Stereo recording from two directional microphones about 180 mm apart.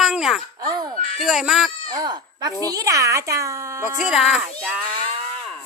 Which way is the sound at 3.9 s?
Centre (ahead or behind).